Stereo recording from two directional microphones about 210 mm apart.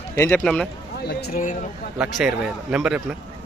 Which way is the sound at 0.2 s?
5° left (ahead or behind).